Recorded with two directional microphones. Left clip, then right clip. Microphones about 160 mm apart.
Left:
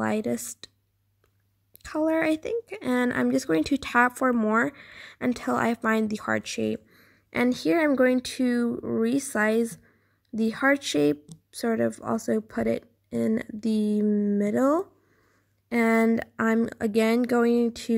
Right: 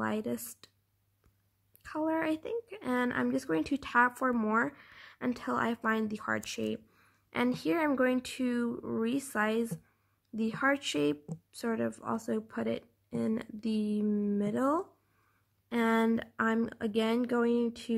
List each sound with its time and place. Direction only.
0.0 s speech: 25° left (ahead or behind)
1.8 s speech: 25° left (ahead or behind)